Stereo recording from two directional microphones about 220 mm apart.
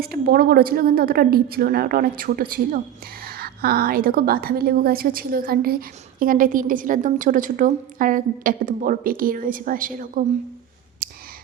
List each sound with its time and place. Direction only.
0.0 s a woman's voice: 45° right (ahead or behind)